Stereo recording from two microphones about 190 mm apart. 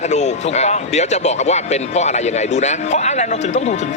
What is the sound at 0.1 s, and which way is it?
Speech, 35° left (ahead or behind).